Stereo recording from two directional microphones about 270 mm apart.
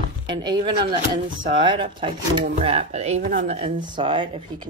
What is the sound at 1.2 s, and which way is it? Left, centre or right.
Speech, right.